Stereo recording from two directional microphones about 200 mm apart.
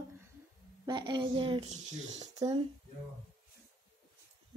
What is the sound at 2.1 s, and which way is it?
Speech, 25° right (ahead or behind).